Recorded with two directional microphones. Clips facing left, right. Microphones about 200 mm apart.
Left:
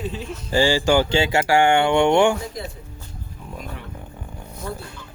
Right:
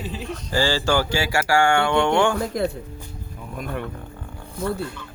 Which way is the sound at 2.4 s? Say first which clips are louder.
Right 8 dB; 60° right (ahead or behind).